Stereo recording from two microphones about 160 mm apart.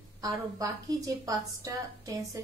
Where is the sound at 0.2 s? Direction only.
25° right (ahead or behind).